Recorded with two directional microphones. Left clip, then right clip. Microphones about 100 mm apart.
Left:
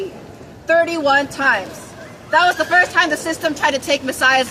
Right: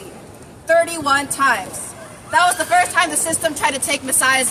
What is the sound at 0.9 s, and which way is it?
A woman's voice, 35° right (ahead or behind).